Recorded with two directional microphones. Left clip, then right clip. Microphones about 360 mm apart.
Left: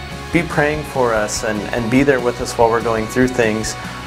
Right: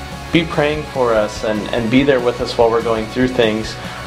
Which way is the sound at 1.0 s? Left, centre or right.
Left.